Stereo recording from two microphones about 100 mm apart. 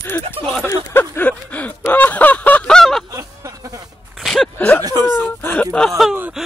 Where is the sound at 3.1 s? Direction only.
30° right (ahead or behind).